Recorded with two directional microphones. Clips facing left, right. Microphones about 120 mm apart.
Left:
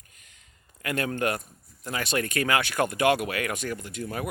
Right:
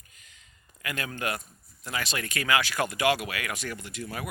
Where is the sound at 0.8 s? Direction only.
45° left (ahead or behind).